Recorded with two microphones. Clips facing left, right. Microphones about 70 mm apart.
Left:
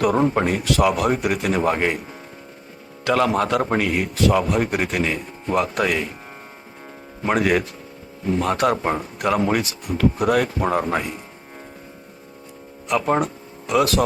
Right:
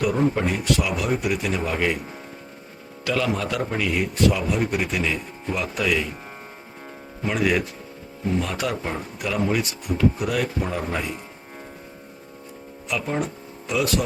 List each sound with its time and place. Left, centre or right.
0.0 s a man's voice: left
3.1 s a man's voice: left
7.3 s a man's voice: left
12.9 s speech: left